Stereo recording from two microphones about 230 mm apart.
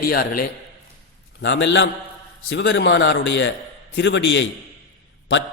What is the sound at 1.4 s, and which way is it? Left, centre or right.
A man's voice, left.